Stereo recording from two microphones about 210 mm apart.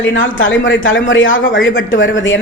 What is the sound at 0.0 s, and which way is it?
A man's voice, 65° left (ahead or behind).